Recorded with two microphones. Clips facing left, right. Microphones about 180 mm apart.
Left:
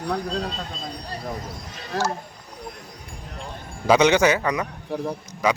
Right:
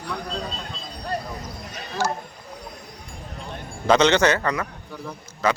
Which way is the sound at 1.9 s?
80° left.